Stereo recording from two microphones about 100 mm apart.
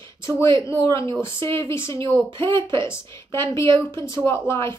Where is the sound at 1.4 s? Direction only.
25° left (ahead or behind).